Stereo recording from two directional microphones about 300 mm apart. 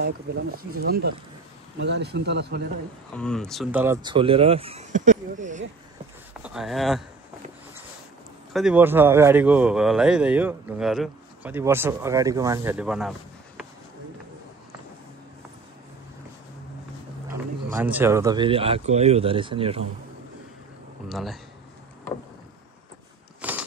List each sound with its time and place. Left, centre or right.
0.0 s speech: right
3.2 s speech: centre; by 5.6 s right
6.4 s speech: centre
8.5 s speech: centre
17.3 s speech: centre
21.1 s speech: centre
23.4 s biting: centre